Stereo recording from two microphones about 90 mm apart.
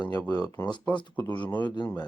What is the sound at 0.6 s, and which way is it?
Speech, 75° left (ahead or behind).